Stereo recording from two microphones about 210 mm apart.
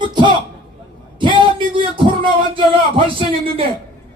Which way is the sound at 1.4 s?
25° right (ahead or behind).